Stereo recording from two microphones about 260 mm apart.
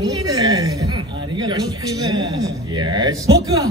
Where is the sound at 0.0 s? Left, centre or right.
Centre.